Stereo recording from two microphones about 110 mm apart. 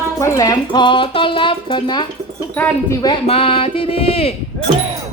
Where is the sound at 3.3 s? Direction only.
60° left (ahead or behind).